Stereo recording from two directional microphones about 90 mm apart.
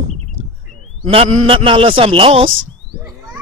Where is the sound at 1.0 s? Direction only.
90° right.